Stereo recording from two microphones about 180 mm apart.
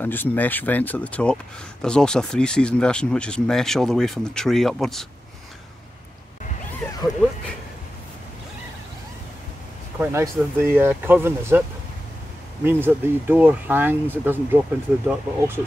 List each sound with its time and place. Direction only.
0.0 s speech: 10° left (ahead or behind)
6.8 s zipper: 5° left (ahead or behind)
9.9 s speech: 15° right (ahead or behind)
12.6 s speech: 10° right (ahead or behind)